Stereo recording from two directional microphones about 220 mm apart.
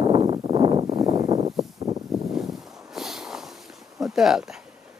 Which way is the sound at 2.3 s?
Centre (ahead or behind).